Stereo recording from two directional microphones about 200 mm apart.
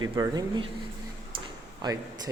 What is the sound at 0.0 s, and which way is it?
Speech, 20° right (ahead or behind).